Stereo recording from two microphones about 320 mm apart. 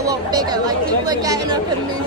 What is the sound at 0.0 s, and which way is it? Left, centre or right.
Speech, centre.